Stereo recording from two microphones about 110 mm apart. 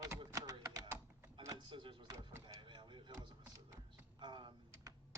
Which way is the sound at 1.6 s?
50° right (ahead or behind).